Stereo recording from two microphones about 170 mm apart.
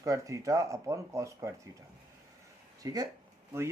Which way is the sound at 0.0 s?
20° right (ahead or behind).